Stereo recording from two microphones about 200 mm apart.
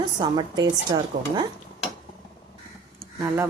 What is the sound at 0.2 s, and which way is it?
A woman's voice, 20° right (ahead or behind).